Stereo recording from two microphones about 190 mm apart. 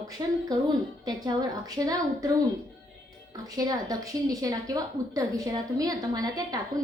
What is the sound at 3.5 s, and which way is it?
A woman's voice, 20° right (ahead or behind).